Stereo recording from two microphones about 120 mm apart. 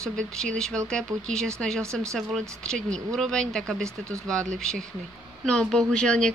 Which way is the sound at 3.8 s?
25° right (ahead or behind).